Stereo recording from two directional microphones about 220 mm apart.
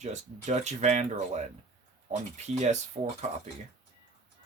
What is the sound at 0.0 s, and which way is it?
Speech, 30° right (ahead or behind).